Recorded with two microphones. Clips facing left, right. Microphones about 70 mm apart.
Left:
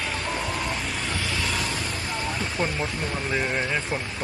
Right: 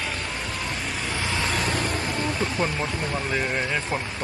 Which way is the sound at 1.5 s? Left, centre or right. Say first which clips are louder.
Right 3 dB; right.